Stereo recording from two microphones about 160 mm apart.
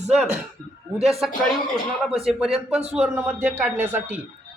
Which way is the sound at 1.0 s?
Centre (ahead or behind).